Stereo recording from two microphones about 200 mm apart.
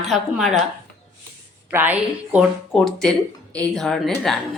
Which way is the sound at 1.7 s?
10° right (ahead or behind).